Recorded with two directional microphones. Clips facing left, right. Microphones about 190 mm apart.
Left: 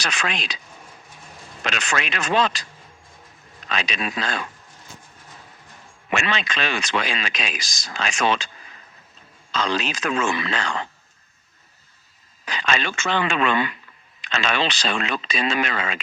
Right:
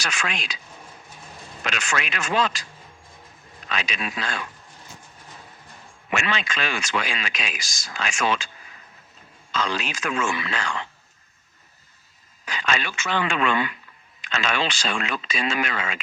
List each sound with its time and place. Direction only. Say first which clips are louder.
0.0 s speech: left 2 dB; 35° left (ahead or behind)
1.6 s speech: left 2 dB; 35° left (ahead or behind)
3.7 s speech: left 3 dB; 35° left (ahead or behind)
6.1 s a man's voice: left 2 dB; 25° left (ahead or behind)
6.4 s speech: left 2 dB; 35° left (ahead or behind)
9.5 s speech: left 3 dB; 35° left (ahead or behind)
13.3 s a man's voice: left 2 dB; 25° left (ahead or behind)